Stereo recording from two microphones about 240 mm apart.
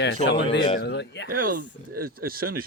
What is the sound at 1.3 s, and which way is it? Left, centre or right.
Speech, right.